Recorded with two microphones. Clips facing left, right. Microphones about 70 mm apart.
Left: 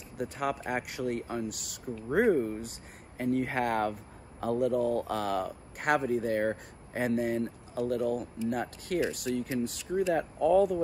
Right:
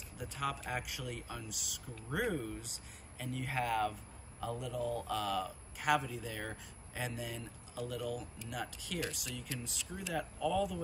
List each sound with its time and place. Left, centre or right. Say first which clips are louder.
0.2 s speech: left 7 dB; left
2.0 s speech: left 11 dB; left
3.2 s speech: left 9 dB; left